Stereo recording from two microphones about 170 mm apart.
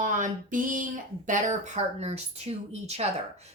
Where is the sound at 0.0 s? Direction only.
50° right (ahead or behind).